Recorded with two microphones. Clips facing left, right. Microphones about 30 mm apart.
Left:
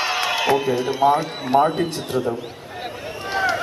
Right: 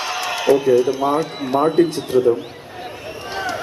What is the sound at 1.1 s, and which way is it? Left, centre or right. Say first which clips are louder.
A man's voice: left 1 dB; centre.